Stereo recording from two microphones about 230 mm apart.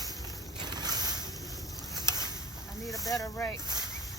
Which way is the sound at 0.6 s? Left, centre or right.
Centre.